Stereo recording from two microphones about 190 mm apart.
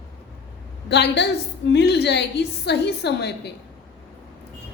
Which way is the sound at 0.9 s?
65° left (ahead or behind).